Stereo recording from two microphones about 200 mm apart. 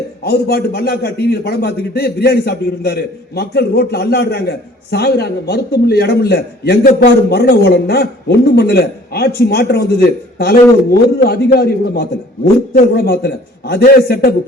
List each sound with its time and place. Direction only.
0.3 s a man's voice: 55° left (ahead or behind)